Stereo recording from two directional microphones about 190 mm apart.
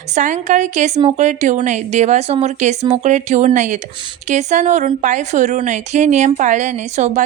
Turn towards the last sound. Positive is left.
turn(degrees=-40)  # may be behind; listen again after turning